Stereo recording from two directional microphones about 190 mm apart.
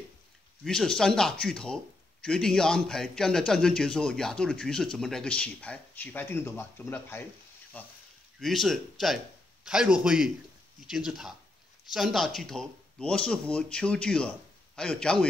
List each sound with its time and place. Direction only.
0.7 s a man's voice: 5° left (ahead or behind)